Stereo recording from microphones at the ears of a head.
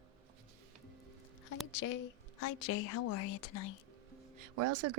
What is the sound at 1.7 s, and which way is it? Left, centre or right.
A woman's voice, left.